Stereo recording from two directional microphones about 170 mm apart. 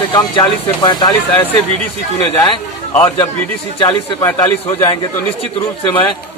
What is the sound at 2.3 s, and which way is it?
Speech, 30° left (ahead or behind).